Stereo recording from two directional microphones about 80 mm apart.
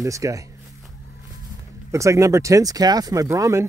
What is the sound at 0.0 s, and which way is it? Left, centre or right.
Speech, right.